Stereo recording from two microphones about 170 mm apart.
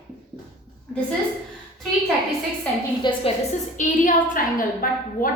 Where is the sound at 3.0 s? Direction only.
25° left (ahead or behind).